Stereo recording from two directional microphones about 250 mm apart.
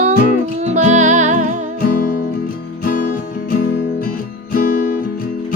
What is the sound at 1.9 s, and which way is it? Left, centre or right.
Music, left.